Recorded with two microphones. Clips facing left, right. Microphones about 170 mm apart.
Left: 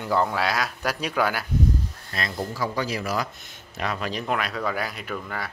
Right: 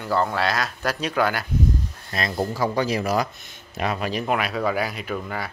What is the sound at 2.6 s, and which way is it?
A man's voice, 20° right (ahead or behind).